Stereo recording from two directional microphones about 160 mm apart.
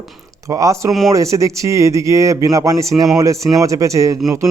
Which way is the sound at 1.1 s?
20° right (ahead or behind).